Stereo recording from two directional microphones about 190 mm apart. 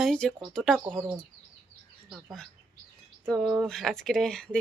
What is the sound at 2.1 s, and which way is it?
Speech, centre (ahead or behind).